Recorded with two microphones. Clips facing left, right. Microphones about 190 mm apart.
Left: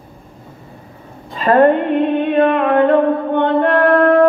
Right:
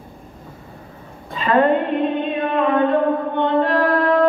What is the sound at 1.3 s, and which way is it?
Speech, 50° left (ahead or behind).